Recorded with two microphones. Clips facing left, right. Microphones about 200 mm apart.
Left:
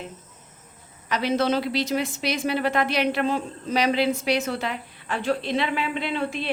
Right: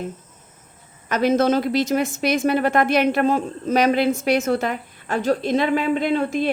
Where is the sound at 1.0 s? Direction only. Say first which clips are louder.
Right 5 dB; 45° right (ahead or behind).